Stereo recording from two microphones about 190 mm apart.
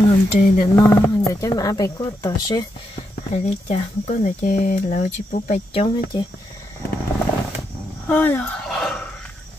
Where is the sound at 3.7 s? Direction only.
35° left (ahead or behind).